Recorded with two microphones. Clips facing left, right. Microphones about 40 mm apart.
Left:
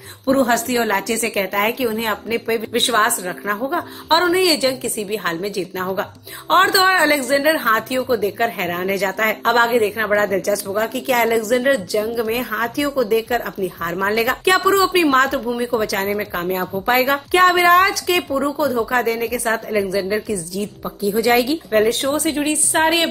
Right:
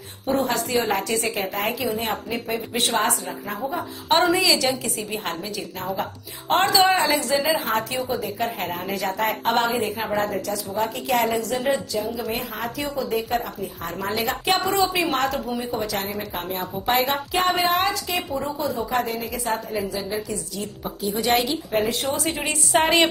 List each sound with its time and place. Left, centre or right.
0.3 s a woman's voice: left
1.8 s a woman's voice: left
4.4 s a woman's voice: left
9.6 s a woman's voice: left
11.1 s a woman's voice: left
13.9 s a woman's voice: left
15.6 s a woman's voice: left
21.7 s a woman's voice: left
22.3 s a woman's voice: left
22.7 s a woman's voice: centre